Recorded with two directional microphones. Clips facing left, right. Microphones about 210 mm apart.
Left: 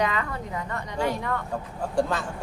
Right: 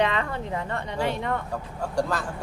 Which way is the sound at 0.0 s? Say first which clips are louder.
Right 2 dB; 30° right (ahead or behind).